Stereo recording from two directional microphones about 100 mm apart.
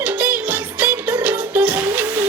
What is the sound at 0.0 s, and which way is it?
Music, 15° right (ahead or behind).